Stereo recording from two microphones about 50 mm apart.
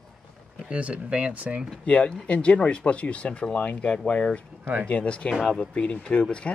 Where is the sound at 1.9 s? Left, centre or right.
Left.